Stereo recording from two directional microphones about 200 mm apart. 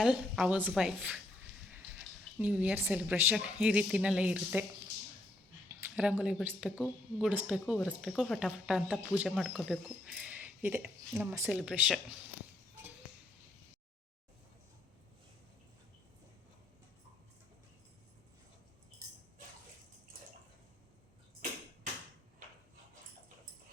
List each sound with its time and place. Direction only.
0.0 s speech: 5° right (ahead or behind)
2.4 s a woman's voice: 5° right (ahead or behind)
5.6 s speech: 5° right (ahead or behind)
19.0 s tambourine: 15° right (ahead or behind)